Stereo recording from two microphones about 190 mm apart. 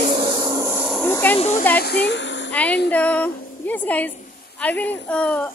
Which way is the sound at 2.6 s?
65° left (ahead or behind).